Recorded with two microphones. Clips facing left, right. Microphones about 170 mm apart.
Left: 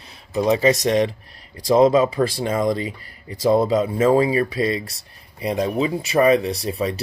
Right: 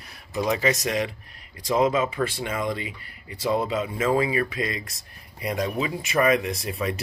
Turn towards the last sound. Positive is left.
turn(degrees=30)  # may be behind; listen again after turning